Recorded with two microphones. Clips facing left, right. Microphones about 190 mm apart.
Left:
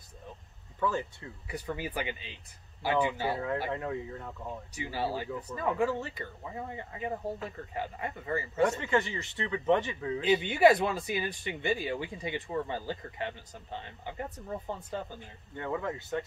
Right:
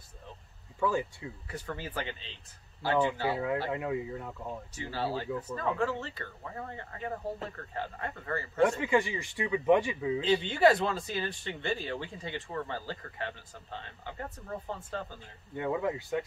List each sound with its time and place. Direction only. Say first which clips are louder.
0.7 s speech: right 2 dB; 10° right (ahead or behind)
1.5 s speech: left 4 dB; 15° left (ahead or behind)
3.7 s speech: right 2 dB; 10° right (ahead or behind)
4.7 s speech: left 1 dB; 15° left (ahead or behind)
8.6 s speech: right 3 dB; 10° right (ahead or behind)
10.2 s speech: left 2 dB; 15° left (ahead or behind)
15.5 s speech: right 3 dB; 15° right (ahead or behind)